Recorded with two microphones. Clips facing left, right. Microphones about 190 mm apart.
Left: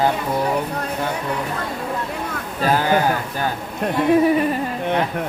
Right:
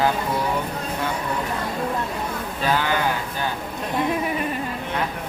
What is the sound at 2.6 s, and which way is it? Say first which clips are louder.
Speech: left 4 dB; 40° left (ahead or behind).